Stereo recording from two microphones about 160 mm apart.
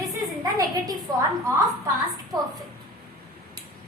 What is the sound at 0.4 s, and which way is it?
Speech, 25° right (ahead or behind).